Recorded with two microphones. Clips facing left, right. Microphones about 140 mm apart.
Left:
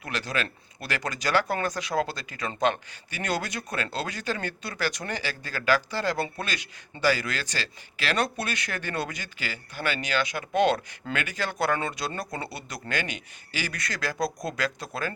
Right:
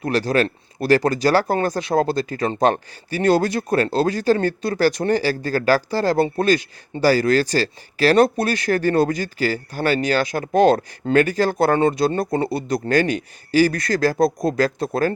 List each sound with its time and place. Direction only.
0.0 s speech: 35° right (ahead or behind)